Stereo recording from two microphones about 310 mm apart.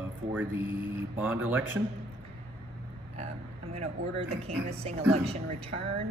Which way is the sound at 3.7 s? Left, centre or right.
Centre.